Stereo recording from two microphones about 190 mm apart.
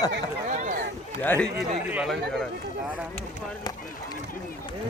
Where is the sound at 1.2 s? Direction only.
10° left (ahead or behind).